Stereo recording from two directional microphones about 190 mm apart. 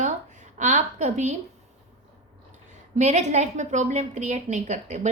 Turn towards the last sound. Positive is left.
turn(degrees=-40)  # may be behind; listen again after turning